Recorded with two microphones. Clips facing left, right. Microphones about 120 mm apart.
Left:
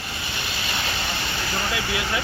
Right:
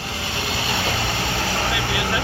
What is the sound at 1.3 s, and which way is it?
Vehicle, 75° right (ahead or behind).